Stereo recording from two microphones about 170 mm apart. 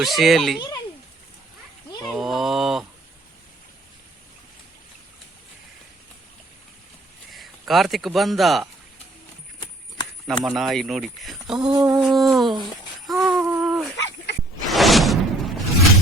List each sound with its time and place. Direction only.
0.0 s speech: centre (ahead or behind)
2.0 s speech: centre (ahead or behind)
7.3 s speech: centre (ahead or behind)
10.2 s speech: centre (ahead or behind)
11.6 s a sound: 25° right (ahead or behind)
11.9 s speech: centre (ahead or behind)
13.1 s a sound: centre (ahead or behind)
13.9 s dog: 90° left
14.7 s a sound: centre (ahead or behind)